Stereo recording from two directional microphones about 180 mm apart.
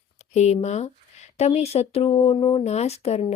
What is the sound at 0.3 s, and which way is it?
A woman's voice, 40° left (ahead or behind).